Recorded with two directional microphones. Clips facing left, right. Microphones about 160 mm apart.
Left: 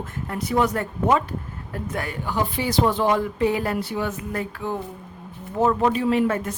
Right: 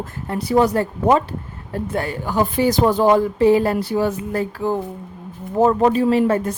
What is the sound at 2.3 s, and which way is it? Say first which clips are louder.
Speech: right 6 dB; 45° right (ahead or behind).